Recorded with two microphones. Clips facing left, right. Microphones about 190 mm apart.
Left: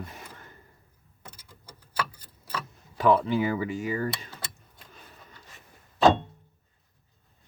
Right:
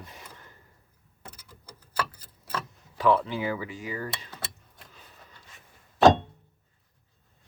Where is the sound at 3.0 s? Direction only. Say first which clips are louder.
Left 2 dB; 50° left (ahead or behind).